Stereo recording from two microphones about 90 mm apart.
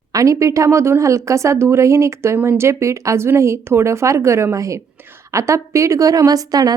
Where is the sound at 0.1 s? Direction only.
35° right (ahead or behind).